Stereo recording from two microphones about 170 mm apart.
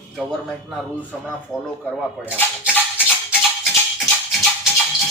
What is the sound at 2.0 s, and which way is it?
Speech, 10° right (ahead or behind).